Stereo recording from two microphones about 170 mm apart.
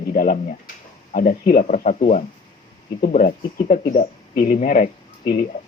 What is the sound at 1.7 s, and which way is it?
Speech, 45° left (ahead or behind).